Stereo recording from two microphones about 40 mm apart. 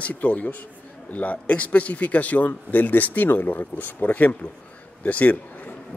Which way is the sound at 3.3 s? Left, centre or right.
Left.